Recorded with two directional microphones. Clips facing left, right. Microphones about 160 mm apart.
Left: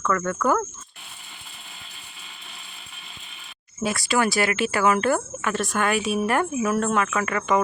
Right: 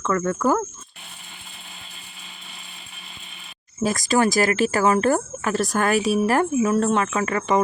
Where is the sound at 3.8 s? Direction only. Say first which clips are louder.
Right 3 dB; 40° right (ahead or behind).